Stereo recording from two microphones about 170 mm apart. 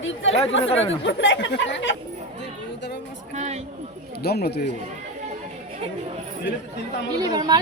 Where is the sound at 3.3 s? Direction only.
40° right (ahead or behind).